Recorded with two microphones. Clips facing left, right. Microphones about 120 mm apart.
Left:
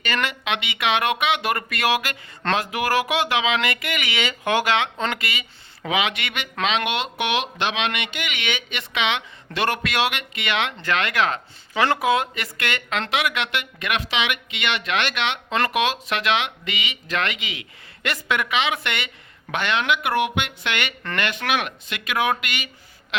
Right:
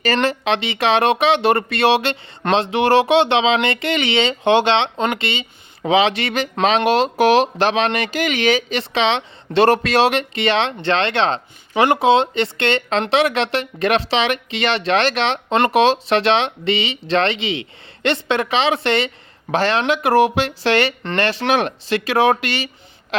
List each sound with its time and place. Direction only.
0.0 s speech: 35° right (ahead or behind)